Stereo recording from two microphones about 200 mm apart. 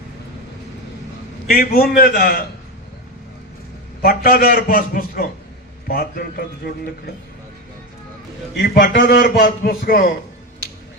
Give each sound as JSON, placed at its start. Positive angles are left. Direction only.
{"t": 1.5, "sound": "a man's voice", "side_deg": 50}
{"t": 4.0, "sound": "a man's voice", "side_deg": 45}
{"t": 8.5, "sound": "a man's voice", "side_deg": 50}